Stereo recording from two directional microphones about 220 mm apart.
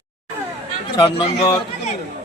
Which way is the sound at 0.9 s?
20° left (ahead or behind).